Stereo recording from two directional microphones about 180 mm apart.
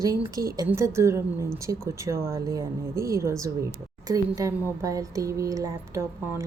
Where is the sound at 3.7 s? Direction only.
20° right (ahead or behind).